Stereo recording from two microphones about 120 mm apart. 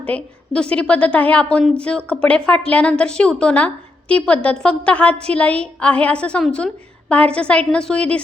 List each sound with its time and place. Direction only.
0.0 s a woman's voice: 10° left (ahead or behind)